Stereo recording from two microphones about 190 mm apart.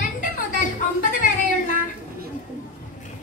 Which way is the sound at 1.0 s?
45° left (ahead or behind).